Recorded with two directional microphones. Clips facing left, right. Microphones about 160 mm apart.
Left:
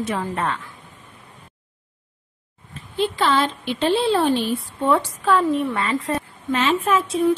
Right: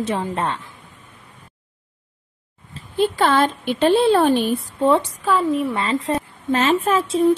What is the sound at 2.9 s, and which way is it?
A woman's voice, 45° right (ahead or behind).